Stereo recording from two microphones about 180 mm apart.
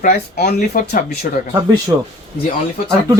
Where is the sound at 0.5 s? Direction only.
50° left (ahead or behind).